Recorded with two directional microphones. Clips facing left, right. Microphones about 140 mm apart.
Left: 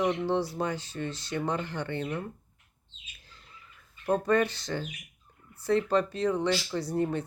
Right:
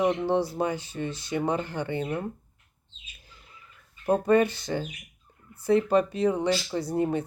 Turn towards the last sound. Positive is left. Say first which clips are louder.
# right 3 dB
turn(degrees=-15)  # may be behind; listen again after turning